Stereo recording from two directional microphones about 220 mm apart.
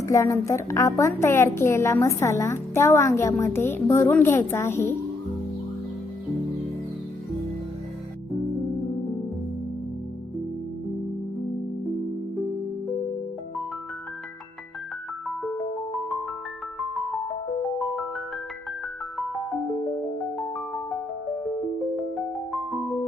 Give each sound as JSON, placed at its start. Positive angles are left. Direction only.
{"t": 0.0, "sound": "a woman's voice", "side_deg": 15}
{"t": 15.3, "sound": "music", "side_deg": 0}
{"t": 17.6, "sound": "music", "side_deg": 0}
{"t": 22.7, "sound": "music", "side_deg": 0}